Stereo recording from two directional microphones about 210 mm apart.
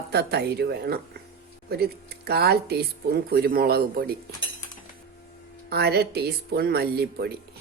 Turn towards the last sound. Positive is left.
turn(degrees=-50)  # may be behind; listen again after turning